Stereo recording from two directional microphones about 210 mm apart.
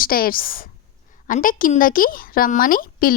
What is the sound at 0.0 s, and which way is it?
A woman's voice, 45° left (ahead or behind).